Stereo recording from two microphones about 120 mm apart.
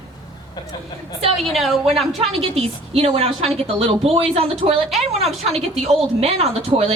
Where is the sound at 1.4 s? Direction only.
Centre (ahead or behind).